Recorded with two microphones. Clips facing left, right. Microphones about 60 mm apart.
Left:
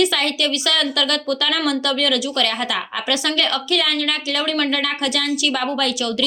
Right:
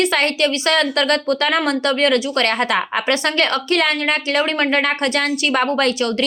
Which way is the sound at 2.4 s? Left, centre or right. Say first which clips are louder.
Right 5 dB; right.